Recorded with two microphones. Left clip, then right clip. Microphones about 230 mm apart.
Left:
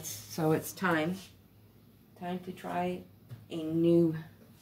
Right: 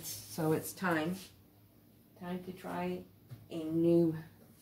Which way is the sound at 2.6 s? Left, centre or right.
Left.